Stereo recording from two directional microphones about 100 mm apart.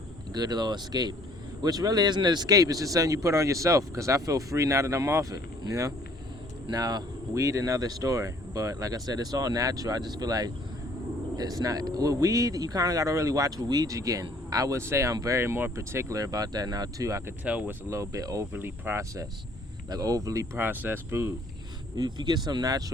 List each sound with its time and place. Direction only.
0.3 s speech: 45° right (ahead or behind)
17.4 s speech: 15° right (ahead or behind)
17.8 s speech: 30° right (ahead or behind)
18.5 s speech: 20° right (ahead or behind)
21.9 s speech: 45° right (ahead or behind)